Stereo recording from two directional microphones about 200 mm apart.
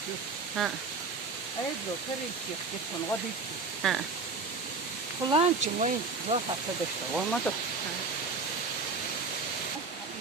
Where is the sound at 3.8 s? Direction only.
Centre (ahead or behind).